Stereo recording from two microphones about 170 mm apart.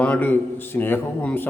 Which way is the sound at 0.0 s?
10° left (ahead or behind).